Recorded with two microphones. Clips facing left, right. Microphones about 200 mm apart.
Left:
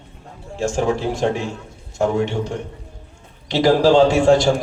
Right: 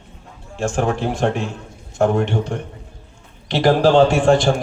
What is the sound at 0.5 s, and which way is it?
A man's voice, 55° right (ahead or behind).